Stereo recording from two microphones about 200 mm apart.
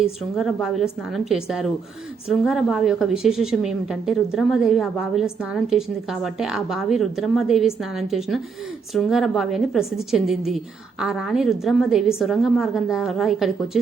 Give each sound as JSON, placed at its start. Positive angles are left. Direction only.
{"t": 0.0, "sound": "a woman's voice", "side_deg": 0}